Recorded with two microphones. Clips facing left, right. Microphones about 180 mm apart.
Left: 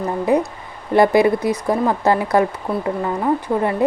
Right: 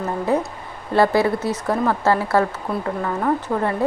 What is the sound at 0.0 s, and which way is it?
Speech, 15° left (ahead or behind).